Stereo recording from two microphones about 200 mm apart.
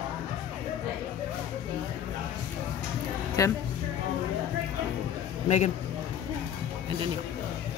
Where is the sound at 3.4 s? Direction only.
15° left (ahead or behind).